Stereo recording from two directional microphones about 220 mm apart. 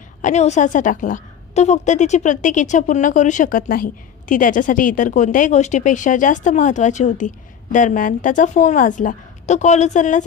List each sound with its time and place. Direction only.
0.2 s a woman's voice: 30° left (ahead or behind)